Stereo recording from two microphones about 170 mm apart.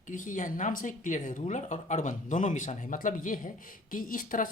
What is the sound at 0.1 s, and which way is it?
Speech, 50° left (ahead or behind).